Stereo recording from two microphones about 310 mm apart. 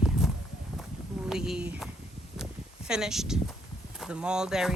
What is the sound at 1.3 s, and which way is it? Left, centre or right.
Speech, centre.